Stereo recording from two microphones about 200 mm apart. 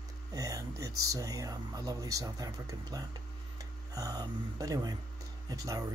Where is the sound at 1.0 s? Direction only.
15° right (ahead or behind).